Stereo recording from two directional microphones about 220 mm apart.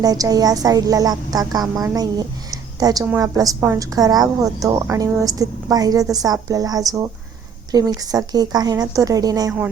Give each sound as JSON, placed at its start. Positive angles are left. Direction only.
{"t": 0.0, "sound": "speech", "side_deg": -15}